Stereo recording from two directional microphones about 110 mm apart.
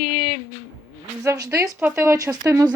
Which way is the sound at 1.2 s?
30° right (ahead or behind).